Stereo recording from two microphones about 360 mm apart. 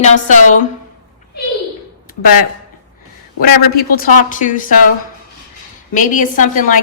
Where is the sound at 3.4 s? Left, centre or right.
Left.